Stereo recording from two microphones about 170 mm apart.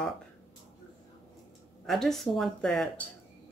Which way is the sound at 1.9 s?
Centre (ahead or behind).